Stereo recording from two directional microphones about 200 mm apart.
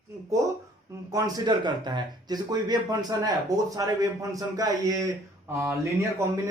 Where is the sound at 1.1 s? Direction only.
15° right (ahead or behind).